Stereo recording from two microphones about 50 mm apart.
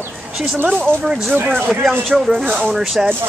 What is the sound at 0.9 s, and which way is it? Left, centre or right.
Speech, right.